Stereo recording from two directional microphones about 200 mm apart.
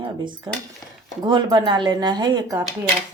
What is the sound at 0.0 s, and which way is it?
Speech, 25° right (ahead or behind).